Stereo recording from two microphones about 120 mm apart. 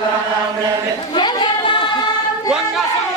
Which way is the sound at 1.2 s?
40° left (ahead or behind).